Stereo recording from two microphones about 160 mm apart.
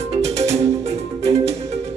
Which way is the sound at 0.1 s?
40° right (ahead or behind).